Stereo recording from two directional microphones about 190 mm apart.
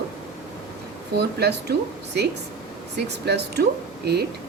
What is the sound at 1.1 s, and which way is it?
Speech, 60° right (ahead or behind).